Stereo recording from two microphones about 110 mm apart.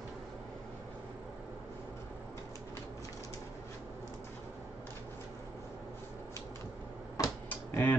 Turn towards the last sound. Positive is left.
turn(degrees=15)  # may be behind; listen again after turning